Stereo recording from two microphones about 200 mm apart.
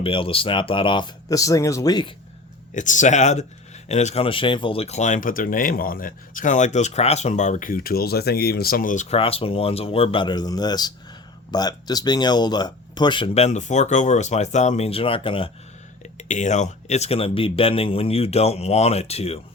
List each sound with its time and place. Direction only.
0.0 s speech: 25° left (ahead or behind)
2.7 s speech: 40° left (ahead or behind)